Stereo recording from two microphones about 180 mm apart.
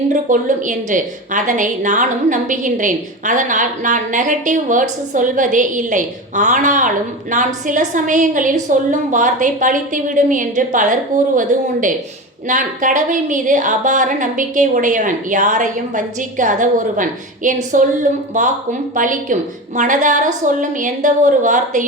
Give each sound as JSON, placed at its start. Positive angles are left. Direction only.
{"t": 0.1, "sound": "a woman's voice", "side_deg": -45}